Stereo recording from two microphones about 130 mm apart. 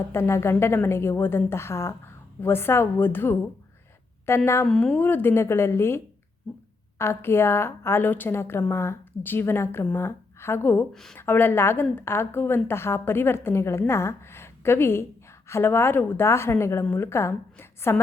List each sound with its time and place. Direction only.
0.0 s a woman's voice: 20° left (ahead or behind)
4.6 s a woman's voice: 5° left (ahead or behind)
7.0 s a woman's voice: 20° left (ahead or behind)
10.9 s a woman's voice: centre (ahead or behind)
11.2 s a woman's voice: 15° left (ahead or behind)